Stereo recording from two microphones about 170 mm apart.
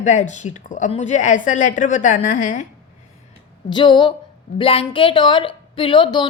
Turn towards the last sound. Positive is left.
turn(degrees=25)  # may be behind; listen again after turning